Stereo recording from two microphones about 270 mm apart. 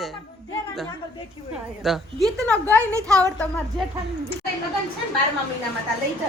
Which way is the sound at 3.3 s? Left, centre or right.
Centre.